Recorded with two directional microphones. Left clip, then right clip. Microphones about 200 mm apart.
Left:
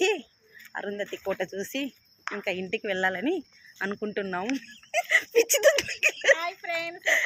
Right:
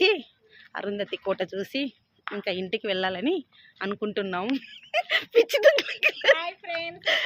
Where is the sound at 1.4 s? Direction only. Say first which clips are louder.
Right 2 dB; 5° right (ahead or behind).